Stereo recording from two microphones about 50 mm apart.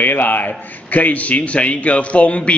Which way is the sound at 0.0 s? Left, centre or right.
Left.